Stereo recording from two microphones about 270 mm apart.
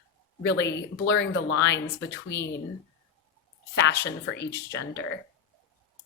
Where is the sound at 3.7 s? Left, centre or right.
Left.